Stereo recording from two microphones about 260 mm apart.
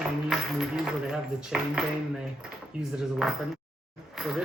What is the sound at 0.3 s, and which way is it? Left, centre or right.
Music, centre.